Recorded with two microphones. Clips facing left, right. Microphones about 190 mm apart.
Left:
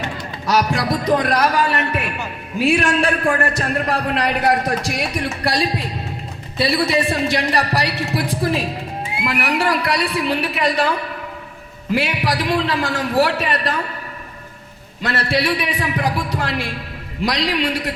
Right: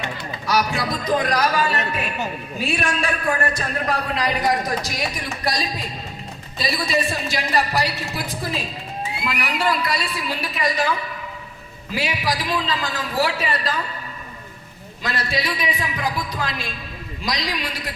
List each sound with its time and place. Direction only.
0.7 s a man's voice: 60° left (ahead or behind)
15.0 s a man's voice: 65° left (ahead or behind)